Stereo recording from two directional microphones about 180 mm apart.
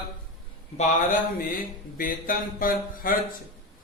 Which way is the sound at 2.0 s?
50° left (ahead or behind).